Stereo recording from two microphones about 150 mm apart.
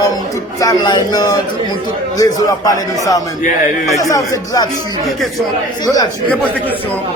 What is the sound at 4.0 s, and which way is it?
Speech, 25° left (ahead or behind).